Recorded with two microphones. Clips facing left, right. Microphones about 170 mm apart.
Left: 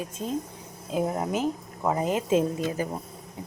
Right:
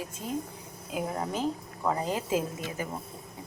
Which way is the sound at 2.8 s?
35° left (ahead or behind).